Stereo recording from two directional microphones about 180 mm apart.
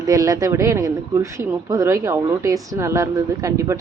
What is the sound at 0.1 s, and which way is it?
A woman's voice, 20° right (ahead or behind).